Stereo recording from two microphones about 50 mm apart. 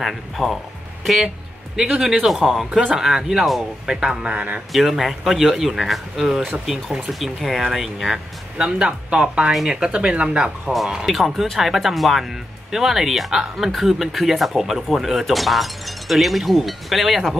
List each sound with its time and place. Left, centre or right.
0.0 s speech: centre
1.8 s speech: centre
2.2 s speech: centre; by 4.5 s right
4.7 s speech: centre
8.5 s speech: centre
11.1 s speech: centre